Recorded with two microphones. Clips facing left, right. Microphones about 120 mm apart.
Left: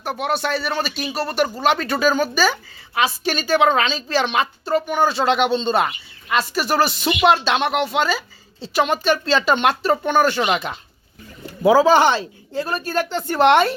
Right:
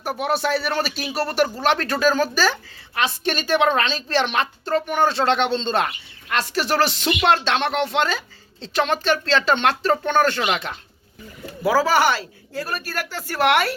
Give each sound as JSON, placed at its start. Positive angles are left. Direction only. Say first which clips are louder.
{"t": 0.0, "sound": "speech", "louder": "even", "side_deg": 0}